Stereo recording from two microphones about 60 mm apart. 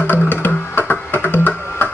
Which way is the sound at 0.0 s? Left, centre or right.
Left.